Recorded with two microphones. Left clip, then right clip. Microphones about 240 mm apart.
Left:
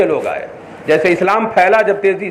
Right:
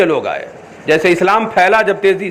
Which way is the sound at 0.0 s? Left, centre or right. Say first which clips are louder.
Right 1 dB; right.